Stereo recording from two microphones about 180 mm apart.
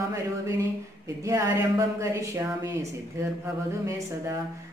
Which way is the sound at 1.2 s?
15° right (ahead or behind).